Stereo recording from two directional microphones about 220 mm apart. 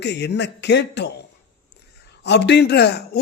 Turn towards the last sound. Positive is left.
turn(degrees=50)  # may be behind; listen again after turning